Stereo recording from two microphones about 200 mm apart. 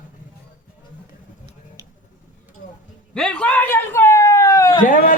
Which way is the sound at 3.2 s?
5° left (ahead or behind).